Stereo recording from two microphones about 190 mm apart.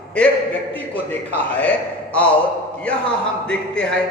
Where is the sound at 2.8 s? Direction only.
5° left (ahead or behind).